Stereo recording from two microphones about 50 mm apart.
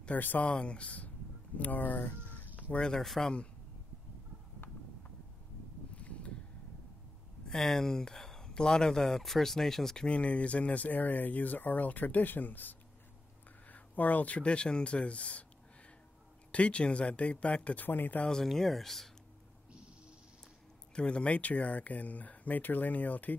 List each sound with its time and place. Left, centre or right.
0.0 s speech: left
0.6 s speech: left
2.2 s chicken: left
2.7 s speech: centre
5.9 s a sound: left
7.4 s speech: centre
10.0 s speech: left
16.5 s speech: left
17.8 s speech: left
18.2 s speech: centre
20.9 s speech: left